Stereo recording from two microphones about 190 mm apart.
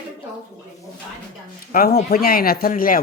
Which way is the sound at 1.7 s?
50° left (ahead or behind).